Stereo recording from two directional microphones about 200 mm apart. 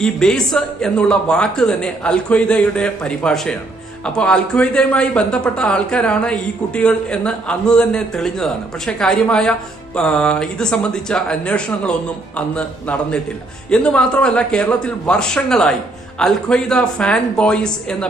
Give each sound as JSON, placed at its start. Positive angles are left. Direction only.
{"t": 0.0, "sound": "speech", "side_deg": 5}